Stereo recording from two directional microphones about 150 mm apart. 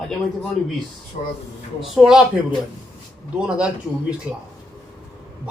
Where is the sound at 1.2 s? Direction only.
60° left (ahead or behind).